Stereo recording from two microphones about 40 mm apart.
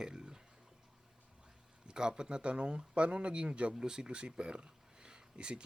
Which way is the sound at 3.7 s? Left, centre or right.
Centre.